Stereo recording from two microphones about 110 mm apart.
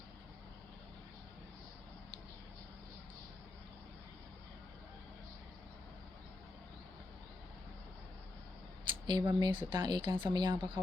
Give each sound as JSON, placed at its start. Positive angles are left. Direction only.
{"t": 9.0, "sound": "speech", "side_deg": -40}